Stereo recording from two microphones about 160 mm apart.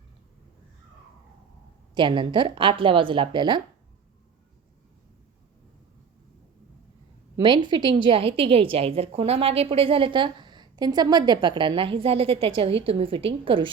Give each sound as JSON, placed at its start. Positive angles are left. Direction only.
{"t": 2.0, "sound": "a woman's voice", "side_deg": -30}
{"t": 7.3, "sound": "a woman's voice", "side_deg": -30}